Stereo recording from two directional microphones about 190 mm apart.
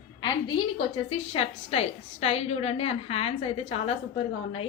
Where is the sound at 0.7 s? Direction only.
30° left (ahead or behind).